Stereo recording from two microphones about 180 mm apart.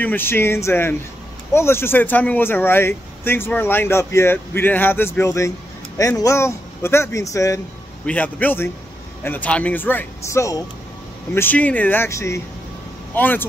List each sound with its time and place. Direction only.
0.0 s speech: 10° left (ahead or behind)